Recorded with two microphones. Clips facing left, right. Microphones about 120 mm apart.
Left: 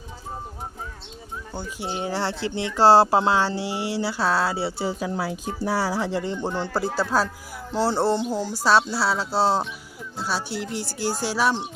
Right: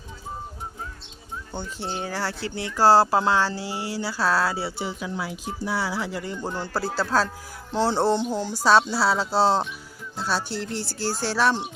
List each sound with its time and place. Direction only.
1.5 s speech: 10° left (ahead or behind)